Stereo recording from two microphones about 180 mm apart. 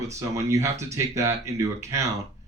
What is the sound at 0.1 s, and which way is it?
Speech, 15° right (ahead or behind).